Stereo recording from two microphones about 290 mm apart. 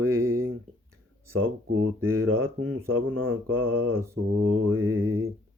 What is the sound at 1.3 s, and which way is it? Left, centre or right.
Mantra, right.